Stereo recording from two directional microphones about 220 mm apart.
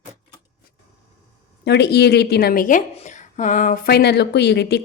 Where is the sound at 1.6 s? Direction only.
50° left (ahead or behind).